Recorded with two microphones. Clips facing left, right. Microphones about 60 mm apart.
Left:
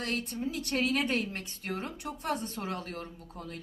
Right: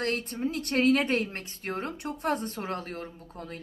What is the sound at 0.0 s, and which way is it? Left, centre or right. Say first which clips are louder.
Speech: right 4 dB; right.